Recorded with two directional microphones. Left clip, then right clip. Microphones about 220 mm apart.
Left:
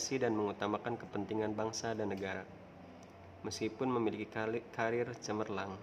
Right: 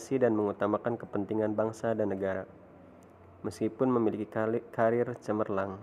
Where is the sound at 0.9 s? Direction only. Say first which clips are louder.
Right 6 dB; centre (ahead or behind).